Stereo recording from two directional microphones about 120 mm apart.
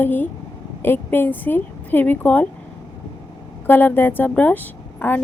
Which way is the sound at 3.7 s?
15° left (ahead or behind).